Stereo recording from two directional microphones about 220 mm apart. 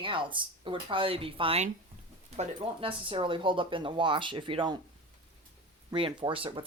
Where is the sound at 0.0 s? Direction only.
20° right (ahead or behind).